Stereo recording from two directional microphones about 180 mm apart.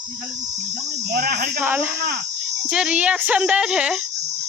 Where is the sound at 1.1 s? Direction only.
60° right (ahead or behind).